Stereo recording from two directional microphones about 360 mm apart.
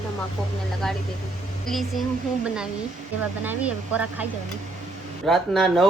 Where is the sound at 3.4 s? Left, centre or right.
Centre.